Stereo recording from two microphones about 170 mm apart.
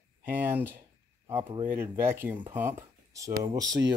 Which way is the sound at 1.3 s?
25° right (ahead or behind).